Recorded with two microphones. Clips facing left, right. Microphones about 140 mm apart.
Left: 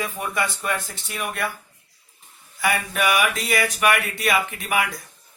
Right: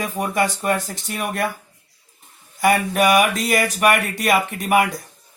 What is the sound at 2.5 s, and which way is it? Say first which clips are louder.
Speech: right 7 dB; 45° right (ahead or behind).